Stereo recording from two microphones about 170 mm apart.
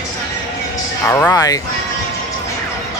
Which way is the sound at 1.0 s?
15° left (ahead or behind).